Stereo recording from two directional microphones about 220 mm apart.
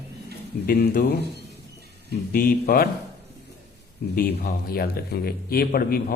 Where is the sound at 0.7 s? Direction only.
45° left (ahead or behind).